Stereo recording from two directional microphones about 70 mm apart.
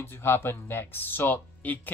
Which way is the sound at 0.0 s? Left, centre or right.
Left.